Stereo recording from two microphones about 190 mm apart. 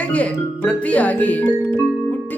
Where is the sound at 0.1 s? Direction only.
5° left (ahead or behind).